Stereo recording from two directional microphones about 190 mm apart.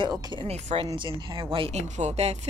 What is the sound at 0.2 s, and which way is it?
Speech, 25° right (ahead or behind).